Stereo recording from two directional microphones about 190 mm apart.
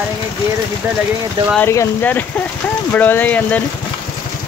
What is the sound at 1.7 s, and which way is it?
Speech, 10° left (ahead or behind).